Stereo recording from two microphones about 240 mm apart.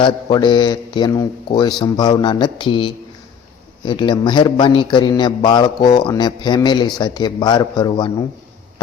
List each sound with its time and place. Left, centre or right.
0.0 s speech: centre
4.0 s a man's voice: centre